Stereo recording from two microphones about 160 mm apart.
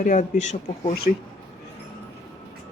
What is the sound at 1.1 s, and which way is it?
Speech, 60° left (ahead or behind).